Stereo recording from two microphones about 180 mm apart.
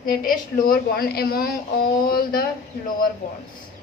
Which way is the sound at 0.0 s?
55° left (ahead or behind).